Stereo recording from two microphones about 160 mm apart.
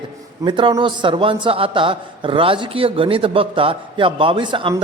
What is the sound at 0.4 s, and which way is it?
A man's voice, 30° right (ahead or behind).